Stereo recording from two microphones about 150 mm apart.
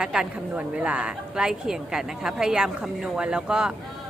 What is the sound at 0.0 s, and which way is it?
Speech, 5° right (ahead or behind).